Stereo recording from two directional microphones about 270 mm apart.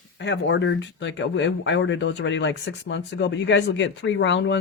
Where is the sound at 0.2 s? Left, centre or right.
Left.